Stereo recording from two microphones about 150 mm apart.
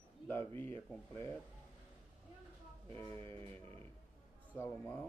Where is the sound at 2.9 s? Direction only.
20° left (ahead or behind).